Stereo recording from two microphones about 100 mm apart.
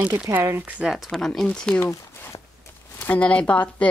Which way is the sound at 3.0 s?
15° left (ahead or behind).